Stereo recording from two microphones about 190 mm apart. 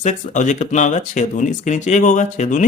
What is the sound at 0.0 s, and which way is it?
Speech, 40° left (ahead or behind).